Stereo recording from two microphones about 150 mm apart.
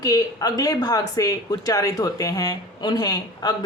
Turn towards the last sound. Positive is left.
turn(degrees=25)  # may be behind; listen again after turning